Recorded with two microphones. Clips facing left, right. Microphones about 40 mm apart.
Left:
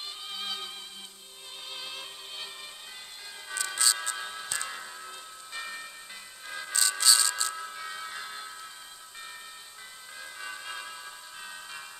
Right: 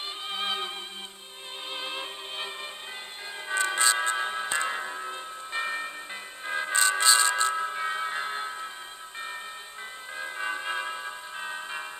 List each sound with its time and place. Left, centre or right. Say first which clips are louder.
0.3 s music: right 7 dB; right
1.7 s music: right 6 dB; right
10.1 s music: right 9 dB; right